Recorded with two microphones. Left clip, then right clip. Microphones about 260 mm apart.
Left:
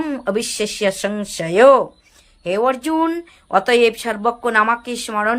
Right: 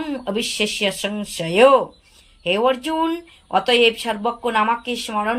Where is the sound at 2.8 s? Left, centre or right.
Centre.